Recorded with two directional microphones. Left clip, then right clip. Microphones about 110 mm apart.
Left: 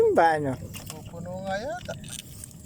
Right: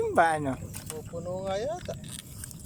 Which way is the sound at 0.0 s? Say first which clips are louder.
Left 4 dB; 10° left (ahead or behind).